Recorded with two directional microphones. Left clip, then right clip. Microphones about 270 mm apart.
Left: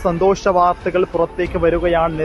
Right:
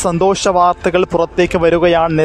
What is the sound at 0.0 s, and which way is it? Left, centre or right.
Speech, right.